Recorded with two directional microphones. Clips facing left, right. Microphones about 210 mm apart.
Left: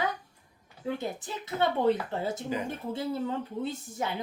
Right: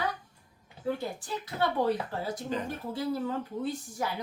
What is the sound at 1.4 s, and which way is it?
Speech, 25° left (ahead or behind).